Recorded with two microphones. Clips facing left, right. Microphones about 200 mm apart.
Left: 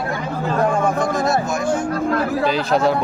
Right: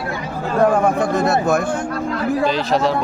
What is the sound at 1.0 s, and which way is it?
Speech, 60° right (ahead or behind).